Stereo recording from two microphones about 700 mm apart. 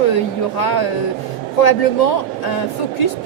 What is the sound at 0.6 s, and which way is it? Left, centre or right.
A woman's voice, left.